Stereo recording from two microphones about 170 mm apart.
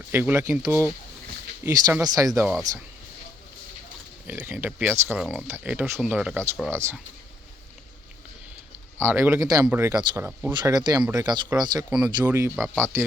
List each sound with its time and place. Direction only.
0.1 s speech: 10° right (ahead or behind)
2.5 s speech: centre (ahead or behind)
4.3 s speech: 10° right (ahead or behind)
9.0 s speech: 15° right (ahead or behind)
11.9 s speech: 5° right (ahead or behind)
12.5 s speech: centre (ahead or behind)
12.8 s speech: 15° right (ahead or behind)